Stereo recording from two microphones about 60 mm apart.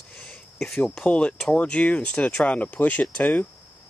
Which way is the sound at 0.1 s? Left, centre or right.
Centre.